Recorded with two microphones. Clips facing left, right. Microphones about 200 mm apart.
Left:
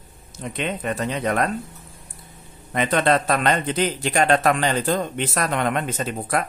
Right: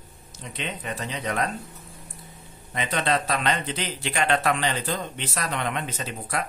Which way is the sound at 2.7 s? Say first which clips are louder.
Left 6 dB; 55° left (ahead or behind).